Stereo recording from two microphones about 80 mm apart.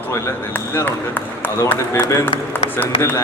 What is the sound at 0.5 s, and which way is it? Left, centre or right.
Speech, left.